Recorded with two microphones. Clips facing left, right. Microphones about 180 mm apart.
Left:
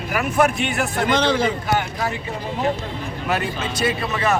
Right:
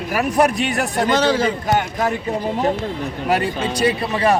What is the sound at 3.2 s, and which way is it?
Speech, 30° right (ahead or behind).